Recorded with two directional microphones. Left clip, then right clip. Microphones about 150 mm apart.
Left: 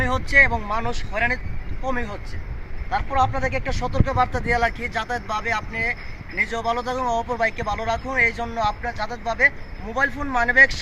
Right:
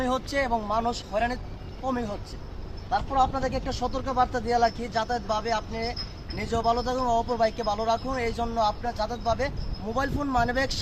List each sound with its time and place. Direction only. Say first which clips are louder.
0.0 s speech: left 10 dB; 40° right (ahead or behind)
3.2 s speech: left 4 dB; 40° right (ahead or behind)